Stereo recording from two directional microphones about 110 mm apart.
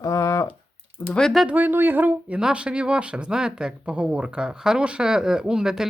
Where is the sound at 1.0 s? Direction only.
5° left (ahead or behind).